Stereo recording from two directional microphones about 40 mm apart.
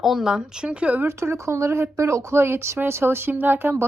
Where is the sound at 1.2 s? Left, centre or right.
Right.